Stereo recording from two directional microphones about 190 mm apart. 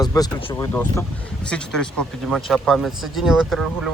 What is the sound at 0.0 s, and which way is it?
Speech, 20° left (ahead or behind).